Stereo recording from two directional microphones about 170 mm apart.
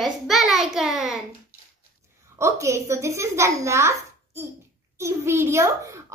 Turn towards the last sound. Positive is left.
turn(degrees=-15)  # may be behind; listen again after turning